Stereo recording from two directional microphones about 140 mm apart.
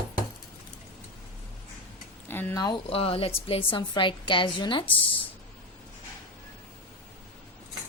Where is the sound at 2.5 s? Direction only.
30° left (ahead or behind).